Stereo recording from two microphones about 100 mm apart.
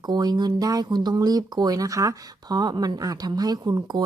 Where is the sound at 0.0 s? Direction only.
45° right (ahead or behind).